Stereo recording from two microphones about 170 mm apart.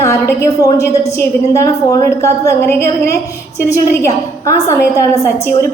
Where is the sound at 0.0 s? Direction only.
20° left (ahead or behind).